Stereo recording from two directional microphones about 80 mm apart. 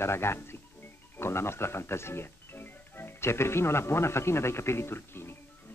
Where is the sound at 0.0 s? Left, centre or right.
Left.